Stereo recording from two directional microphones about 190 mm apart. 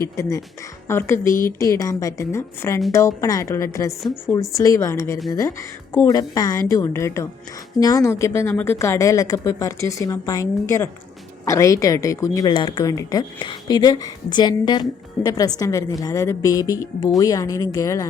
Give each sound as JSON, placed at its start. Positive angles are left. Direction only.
{"t": 0.0, "sound": "a woman's voice", "side_deg": 15}